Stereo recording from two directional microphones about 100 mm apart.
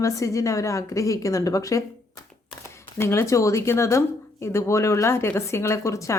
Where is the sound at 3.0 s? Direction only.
25° left (ahead or behind).